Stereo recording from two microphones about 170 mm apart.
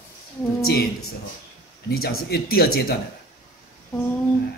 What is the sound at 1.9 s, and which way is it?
A man's voice, 60° left (ahead or behind).